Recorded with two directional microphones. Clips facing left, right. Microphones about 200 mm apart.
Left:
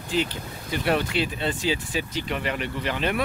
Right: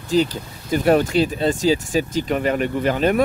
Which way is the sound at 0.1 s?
40° right (ahead or behind).